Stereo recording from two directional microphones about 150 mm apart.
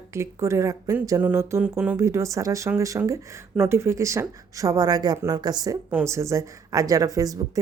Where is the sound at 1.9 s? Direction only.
20° right (ahead or behind).